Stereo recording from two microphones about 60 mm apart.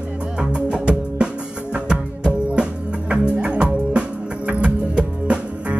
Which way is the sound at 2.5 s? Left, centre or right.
Centre.